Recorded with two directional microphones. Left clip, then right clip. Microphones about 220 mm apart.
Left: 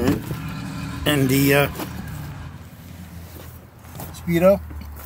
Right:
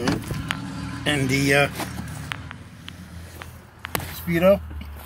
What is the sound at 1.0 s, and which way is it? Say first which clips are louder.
Speech: left 3 dB; 25° left (ahead or behind).